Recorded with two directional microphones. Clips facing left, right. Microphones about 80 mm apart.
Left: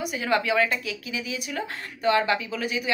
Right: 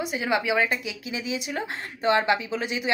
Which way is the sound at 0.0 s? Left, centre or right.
Right.